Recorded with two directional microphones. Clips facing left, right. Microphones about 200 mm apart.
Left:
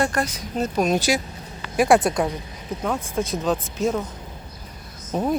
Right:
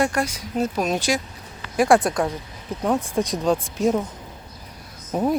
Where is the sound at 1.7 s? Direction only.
20° left (ahead or behind).